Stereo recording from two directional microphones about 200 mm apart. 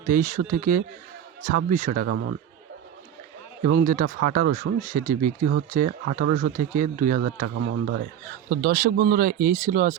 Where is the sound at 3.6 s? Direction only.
45° right (ahead or behind).